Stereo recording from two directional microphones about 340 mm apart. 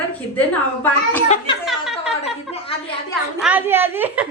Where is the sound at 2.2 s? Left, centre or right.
Centre.